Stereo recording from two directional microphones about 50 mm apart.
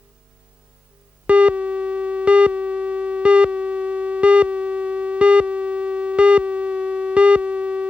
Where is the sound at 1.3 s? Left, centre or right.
Right.